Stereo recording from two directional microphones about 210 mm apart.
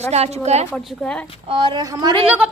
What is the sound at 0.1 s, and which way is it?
Speech, 30° right (ahead or behind).